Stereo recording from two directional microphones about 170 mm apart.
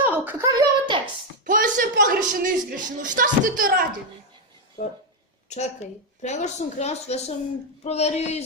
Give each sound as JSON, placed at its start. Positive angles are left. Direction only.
{"t": 0.0, "sound": "a child's voice", "side_deg": -10}
{"t": 1.5, "sound": "a woman's voice", "side_deg": -50}
{"t": 4.8, "sound": "a woman's voice", "side_deg": 45}